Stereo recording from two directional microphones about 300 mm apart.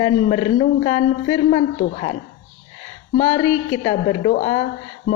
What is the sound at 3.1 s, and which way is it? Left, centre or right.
A woman's voice, centre.